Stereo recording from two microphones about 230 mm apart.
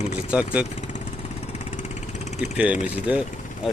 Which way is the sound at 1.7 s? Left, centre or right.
Left.